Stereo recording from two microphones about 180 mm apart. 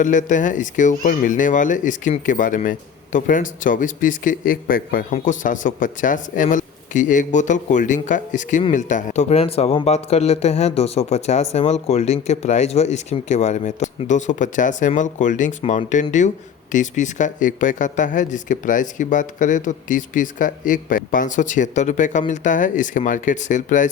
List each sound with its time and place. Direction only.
0.0 s speech: 45° left (ahead or behind)